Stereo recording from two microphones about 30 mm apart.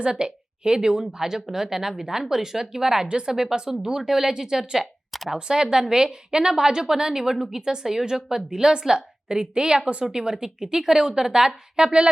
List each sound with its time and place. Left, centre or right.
0.0 s a woman's voice: right
3.1 s a woman's voice: right
3.8 s speech: centre
5.3 s a woman's voice: right